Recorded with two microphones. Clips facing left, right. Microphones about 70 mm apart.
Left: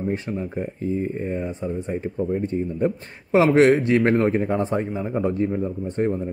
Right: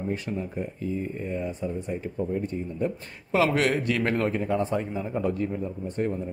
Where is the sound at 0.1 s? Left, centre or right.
Left.